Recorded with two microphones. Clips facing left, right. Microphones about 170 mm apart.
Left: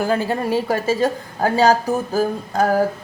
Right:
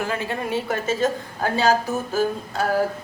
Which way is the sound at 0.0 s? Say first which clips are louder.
Left 6 dB; 35° left (ahead or behind).